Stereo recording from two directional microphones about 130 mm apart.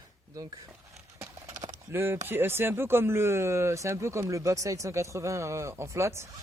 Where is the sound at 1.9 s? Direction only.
20° right (ahead or behind).